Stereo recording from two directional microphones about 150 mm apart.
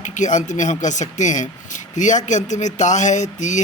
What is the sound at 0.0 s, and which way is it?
Speech, 55° left (ahead or behind).